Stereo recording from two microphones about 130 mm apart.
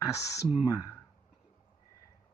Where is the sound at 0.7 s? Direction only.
30° left (ahead or behind).